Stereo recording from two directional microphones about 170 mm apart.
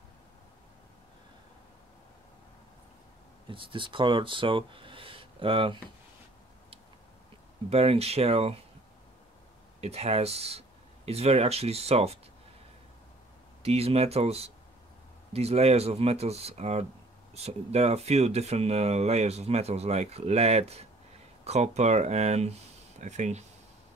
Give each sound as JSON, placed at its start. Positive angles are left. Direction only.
{"t": 3.4, "sound": "speech", "side_deg": -30}
{"t": 7.7, "sound": "speech", "side_deg": -35}
{"t": 9.8, "sound": "speech", "side_deg": -40}
{"t": 13.6, "sound": "speech", "side_deg": -35}